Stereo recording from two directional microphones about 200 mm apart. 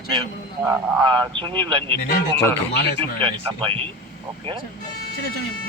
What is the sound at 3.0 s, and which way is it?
Speech, 25° right (ahead or behind).